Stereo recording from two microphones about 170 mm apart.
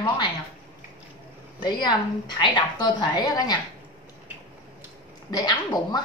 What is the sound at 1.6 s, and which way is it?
A woman's voice, 25° left (ahead or behind).